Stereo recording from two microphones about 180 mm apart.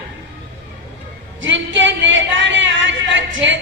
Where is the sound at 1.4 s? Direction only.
90° right.